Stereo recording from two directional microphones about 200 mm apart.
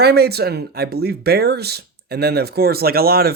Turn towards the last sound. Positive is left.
turn(degrees=-50)  # may be behind; listen again after turning